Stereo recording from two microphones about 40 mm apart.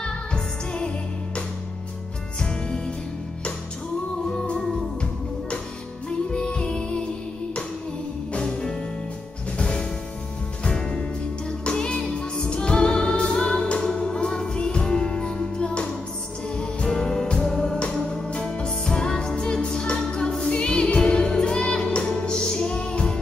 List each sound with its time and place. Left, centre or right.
0.0 s music: left
6.0 s music: left
8.4 s music: centre
11.6 s music: left